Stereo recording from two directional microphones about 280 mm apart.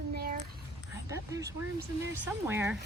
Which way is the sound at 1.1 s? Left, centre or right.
Centre.